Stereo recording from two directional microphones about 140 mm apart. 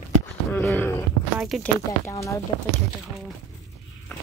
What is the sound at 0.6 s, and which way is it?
Speech, 15° left (ahead or behind).